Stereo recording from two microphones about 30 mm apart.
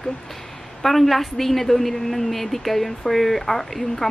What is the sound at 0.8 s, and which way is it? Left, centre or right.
A woman's voice, centre.